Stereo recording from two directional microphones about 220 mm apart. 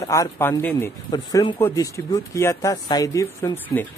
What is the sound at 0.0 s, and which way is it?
Speech, 15° left (ahead or behind).